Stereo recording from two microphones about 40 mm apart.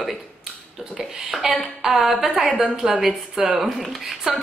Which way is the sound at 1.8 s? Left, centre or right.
Centre.